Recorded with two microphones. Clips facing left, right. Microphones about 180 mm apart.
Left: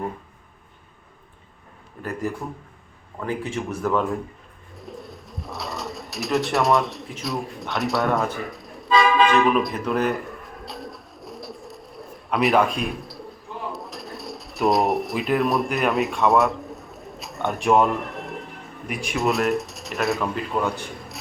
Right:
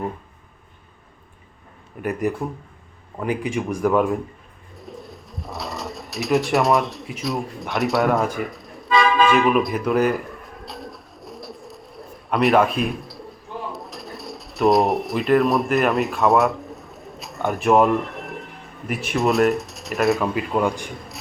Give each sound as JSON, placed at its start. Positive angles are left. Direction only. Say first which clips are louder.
{"t": 2.0, "sound": "speech", "louder": "right 5 dB", "side_deg": -15}
{"t": 4.8, "sound": "bird", "louder": "even", "side_deg": 0}
{"t": 7.1, "sound": "speech", "louder": "right 3 dB", "side_deg": 0}
{"t": 8.4, "sound": "a sound", "louder": "even", "side_deg": 0}
{"t": 18.9, "sound": "speech", "louder": "right 3 dB", "side_deg": 0}
{"t": 20.6, "sound": "speech", "louder": "right 3 dB", "side_deg": -15}